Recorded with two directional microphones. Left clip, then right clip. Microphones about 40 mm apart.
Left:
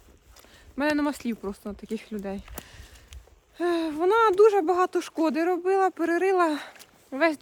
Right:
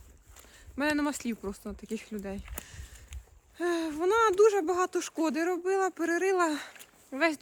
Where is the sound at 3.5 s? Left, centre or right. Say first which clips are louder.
Left 5 dB; left.